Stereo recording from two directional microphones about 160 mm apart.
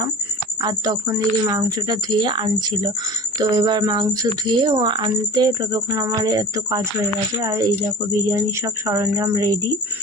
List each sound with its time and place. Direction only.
0.6 s speech: 25° right (ahead or behind)